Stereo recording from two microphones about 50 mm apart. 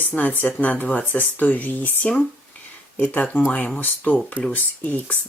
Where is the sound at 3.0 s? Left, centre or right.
Left.